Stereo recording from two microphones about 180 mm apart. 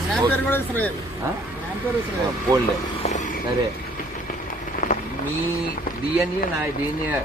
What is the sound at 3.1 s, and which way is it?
Speech, 40° left (ahead or behind).